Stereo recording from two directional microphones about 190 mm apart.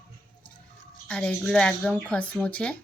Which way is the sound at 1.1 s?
5° left (ahead or behind).